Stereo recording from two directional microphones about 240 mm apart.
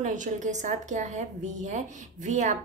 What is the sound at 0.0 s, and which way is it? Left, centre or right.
A woman's voice, right.